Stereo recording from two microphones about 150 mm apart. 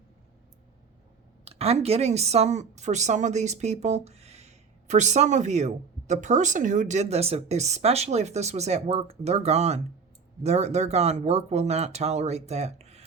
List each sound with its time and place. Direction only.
1.5 s a woman's voice: 45° right (ahead or behind)